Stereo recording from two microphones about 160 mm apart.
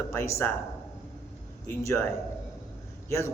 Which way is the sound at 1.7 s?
20° left (ahead or behind).